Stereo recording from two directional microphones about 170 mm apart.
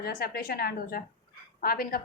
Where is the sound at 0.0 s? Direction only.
60° left (ahead or behind).